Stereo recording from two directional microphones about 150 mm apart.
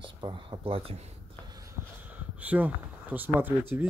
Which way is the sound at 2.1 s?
10° right (ahead or behind).